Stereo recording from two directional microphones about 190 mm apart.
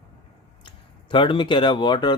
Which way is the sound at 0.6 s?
25° left (ahead or behind).